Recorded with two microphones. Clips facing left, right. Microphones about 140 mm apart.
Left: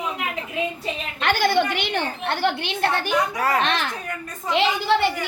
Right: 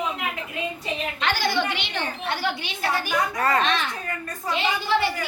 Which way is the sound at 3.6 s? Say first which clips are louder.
Left 1 dB; 65° left (ahead or behind).